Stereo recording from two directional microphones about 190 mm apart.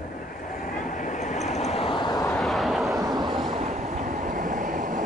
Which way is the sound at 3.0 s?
20° right (ahead or behind).